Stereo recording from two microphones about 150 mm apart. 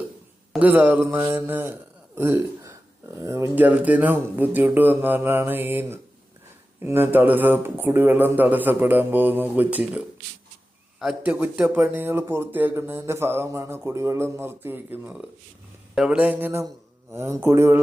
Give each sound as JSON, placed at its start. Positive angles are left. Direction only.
{"t": 0.6, "sound": "a man's voice", "side_deg": -10}
{"t": 11.0, "sound": "a man's voice", "side_deg": -5}